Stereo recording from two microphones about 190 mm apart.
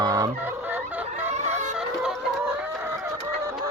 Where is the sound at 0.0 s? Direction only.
20° right (ahead or behind).